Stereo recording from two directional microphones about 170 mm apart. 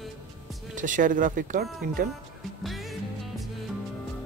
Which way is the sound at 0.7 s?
50° right (ahead or behind).